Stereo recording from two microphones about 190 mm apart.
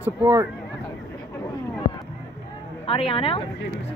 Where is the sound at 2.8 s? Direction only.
30° left (ahead or behind).